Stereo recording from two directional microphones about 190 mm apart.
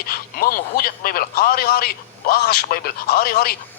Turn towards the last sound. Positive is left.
turn(degrees=50)  # may be behind; listen again after turning